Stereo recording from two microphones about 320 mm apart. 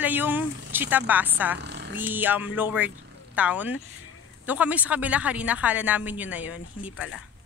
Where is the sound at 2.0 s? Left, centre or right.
Centre.